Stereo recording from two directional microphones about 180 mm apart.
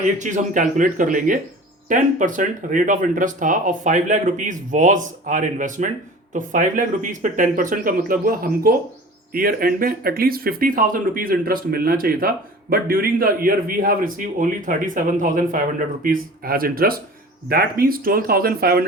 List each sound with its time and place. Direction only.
0.2 s speech: 45° right (ahead or behind)